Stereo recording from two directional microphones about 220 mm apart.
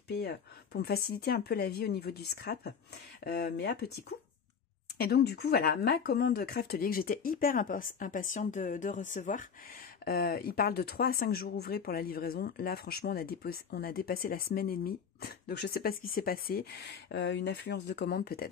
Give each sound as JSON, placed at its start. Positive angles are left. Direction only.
{"t": 0.2, "sound": "speech", "side_deg": 45}